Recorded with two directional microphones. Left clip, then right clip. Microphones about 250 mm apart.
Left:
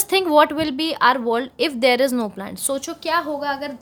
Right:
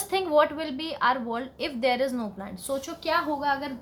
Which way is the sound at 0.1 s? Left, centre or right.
Left.